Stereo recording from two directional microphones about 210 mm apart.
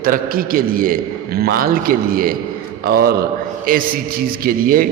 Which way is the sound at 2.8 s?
45° right (ahead or behind).